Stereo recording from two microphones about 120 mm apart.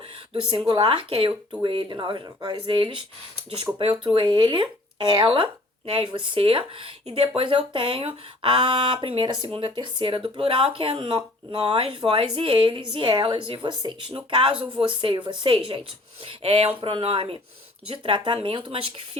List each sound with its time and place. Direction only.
0.7 s speech: 45° right (ahead or behind)
14.5 s speech: 10° right (ahead or behind)
14.8 s speech: 45° right (ahead or behind)